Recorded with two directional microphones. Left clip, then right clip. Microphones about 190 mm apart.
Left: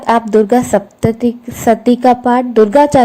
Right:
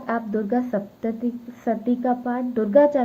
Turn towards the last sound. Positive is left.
turn(degrees=35)  # may be behind; listen again after turning